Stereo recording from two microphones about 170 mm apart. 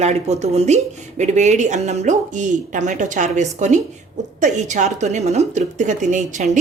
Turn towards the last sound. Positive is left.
turn(degrees=-45)  # may be behind; listen again after turning